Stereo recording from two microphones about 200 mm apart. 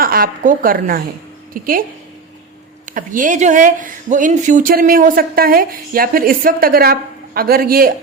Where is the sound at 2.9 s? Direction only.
40° right (ahead or behind).